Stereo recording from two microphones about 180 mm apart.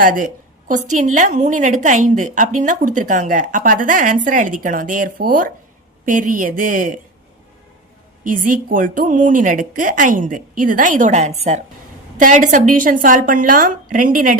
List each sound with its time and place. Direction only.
0.0 s a woman's voice: 50° right (ahead or behind)
8.2 s a woman's voice: 50° right (ahead or behind)